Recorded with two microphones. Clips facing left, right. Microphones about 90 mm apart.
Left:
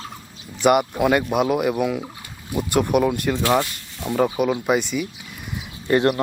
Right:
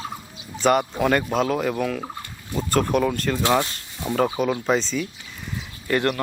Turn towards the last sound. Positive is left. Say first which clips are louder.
# left 4 dB
turn(degrees=25)  # may be behind; listen again after turning